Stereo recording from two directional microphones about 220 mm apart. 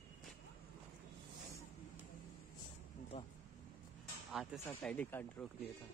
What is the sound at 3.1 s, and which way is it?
Speech, 25° left (ahead or behind).